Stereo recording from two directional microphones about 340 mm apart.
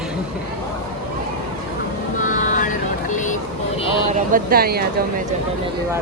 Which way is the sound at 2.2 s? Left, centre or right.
Left.